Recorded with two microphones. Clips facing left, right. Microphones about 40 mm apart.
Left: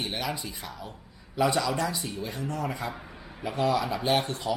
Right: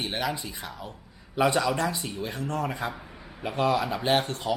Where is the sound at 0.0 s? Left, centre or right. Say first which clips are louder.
Right 2 dB; centre.